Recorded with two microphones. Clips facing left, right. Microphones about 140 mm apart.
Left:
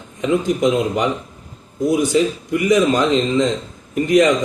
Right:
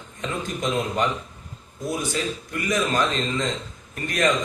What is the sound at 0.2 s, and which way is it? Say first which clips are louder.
Speech: left 12 dB; 15° left (ahead or behind).